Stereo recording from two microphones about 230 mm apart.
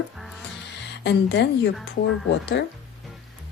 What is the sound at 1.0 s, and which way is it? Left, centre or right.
Speech, left.